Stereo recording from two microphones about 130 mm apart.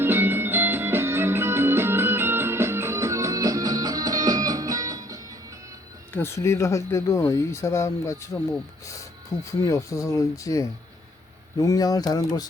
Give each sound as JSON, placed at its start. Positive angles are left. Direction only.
{"t": 0.0, "sound": "music", "side_deg": -15}
{"t": 6.1, "sound": "speech", "side_deg": 20}